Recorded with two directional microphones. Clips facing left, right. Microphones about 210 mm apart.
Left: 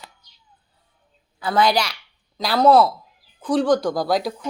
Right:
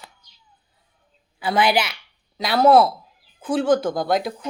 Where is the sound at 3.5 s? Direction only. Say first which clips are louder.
Left 1 dB; centre (ahead or behind).